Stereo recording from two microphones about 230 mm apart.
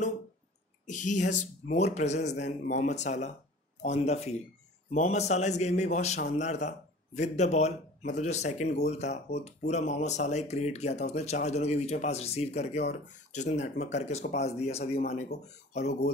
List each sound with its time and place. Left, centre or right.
0.8 s speech: left